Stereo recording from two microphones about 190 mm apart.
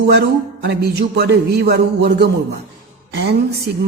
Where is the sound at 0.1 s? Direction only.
60° right (ahead or behind).